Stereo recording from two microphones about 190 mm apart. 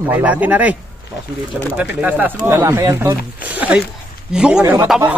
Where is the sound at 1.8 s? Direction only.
10° right (ahead or behind).